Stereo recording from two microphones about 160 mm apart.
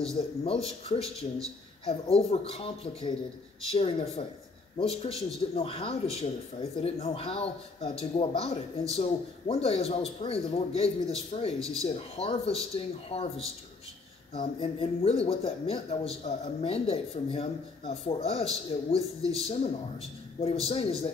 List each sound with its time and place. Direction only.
0.4 s speech: 40° left (ahead or behind)
14.3 s speech: 35° left (ahead or behind)